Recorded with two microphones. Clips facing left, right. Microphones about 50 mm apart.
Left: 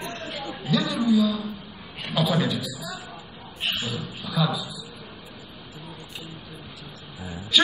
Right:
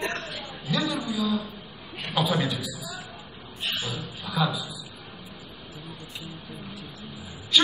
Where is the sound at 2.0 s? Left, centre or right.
Centre.